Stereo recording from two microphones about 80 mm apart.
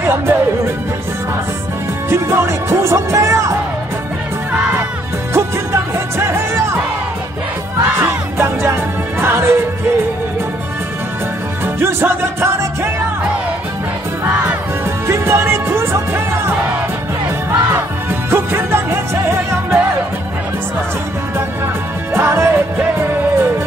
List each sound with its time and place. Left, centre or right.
0.0 s music: right
2.0 s speech: right
4.5 s music: centre
5.3 s music: right
7.8 s music: right
11.6 s music: right
15.0 s music: right
18.3 s music: right
22.1 s music: right